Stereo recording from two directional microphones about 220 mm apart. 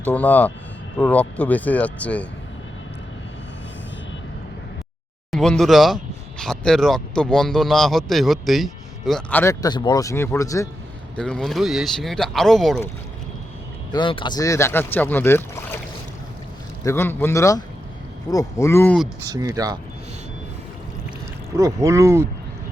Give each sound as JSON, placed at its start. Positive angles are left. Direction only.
{"t": 0.0, "sound": "speech", "side_deg": 10}
{"t": 5.3, "sound": "speech", "side_deg": 0}
{"t": 11.2, "sound": "speech", "side_deg": 5}
{"t": 13.9, "sound": "speech", "side_deg": 20}
{"t": 16.8, "sound": "speech", "side_deg": 10}
{"t": 19.3, "sound": "speech", "side_deg": -15}
{"t": 21.5, "sound": "speech", "side_deg": -15}